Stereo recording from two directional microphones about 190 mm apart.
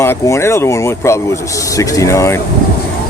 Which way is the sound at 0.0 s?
15° left (ahead or behind).